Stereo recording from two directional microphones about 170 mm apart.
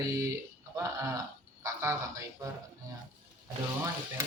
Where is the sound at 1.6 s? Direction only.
15° right (ahead or behind).